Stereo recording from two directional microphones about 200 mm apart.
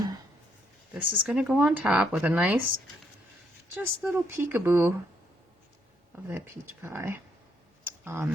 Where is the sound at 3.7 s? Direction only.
10° right (ahead or behind).